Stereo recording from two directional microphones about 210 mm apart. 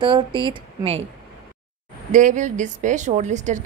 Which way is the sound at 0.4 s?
25° right (ahead or behind).